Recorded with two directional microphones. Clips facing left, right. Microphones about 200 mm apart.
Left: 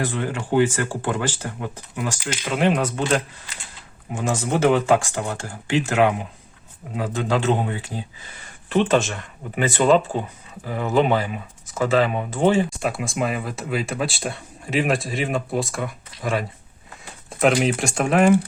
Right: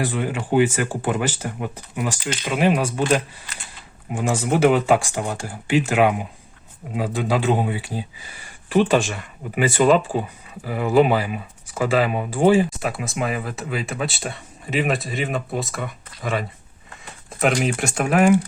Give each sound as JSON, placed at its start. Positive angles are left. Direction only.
{"t": 0.0, "sound": "speech", "side_deg": -15}
{"t": 4.1, "sound": "speech", "side_deg": -15}
{"t": 13.0, "sound": "speech", "side_deg": 0}